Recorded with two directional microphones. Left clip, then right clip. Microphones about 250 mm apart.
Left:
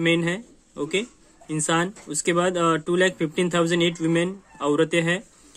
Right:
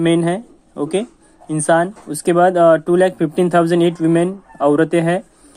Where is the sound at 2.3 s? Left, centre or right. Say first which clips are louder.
Right 12 dB; centre.